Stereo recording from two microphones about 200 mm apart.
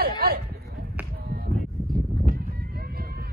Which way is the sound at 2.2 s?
50° right (ahead or behind).